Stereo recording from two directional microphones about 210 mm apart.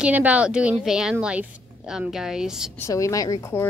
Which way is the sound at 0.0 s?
5° right (ahead or behind).